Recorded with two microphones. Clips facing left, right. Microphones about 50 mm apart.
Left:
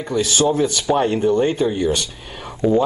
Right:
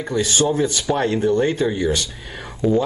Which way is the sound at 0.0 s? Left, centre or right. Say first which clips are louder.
Left 1 dB; right.